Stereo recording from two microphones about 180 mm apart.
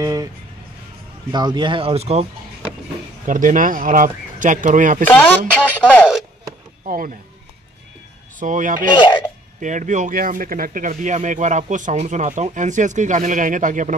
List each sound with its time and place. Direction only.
0.0 s music: 20° right (ahead or behind)
1.3 s speech: 25° right (ahead or behind)
3.3 s speech: 45° right (ahead or behind)
5.0 s speech: 5° left (ahead or behind)
8.4 s speech: 45° right (ahead or behind)
8.9 s speech: 25° left (ahead or behind)
9.6 s speech: 45° right (ahead or behind)